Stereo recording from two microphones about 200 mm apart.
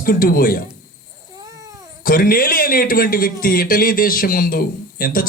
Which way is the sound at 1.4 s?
20° right (ahead or behind).